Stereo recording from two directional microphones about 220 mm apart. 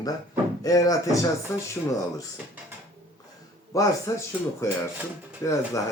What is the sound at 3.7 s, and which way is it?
Speech, 15° left (ahead or behind).